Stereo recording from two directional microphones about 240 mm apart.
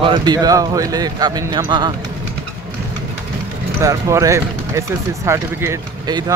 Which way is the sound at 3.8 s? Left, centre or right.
Centre.